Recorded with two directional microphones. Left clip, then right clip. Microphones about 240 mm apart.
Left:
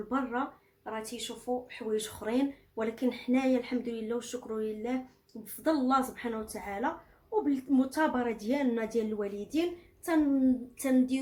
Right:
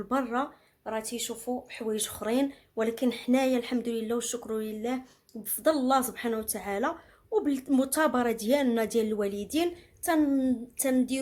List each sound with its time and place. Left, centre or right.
0.1 s speech: right